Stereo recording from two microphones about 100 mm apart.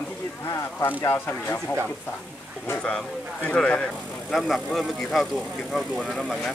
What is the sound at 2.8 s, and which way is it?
Speech, 10° left (ahead or behind).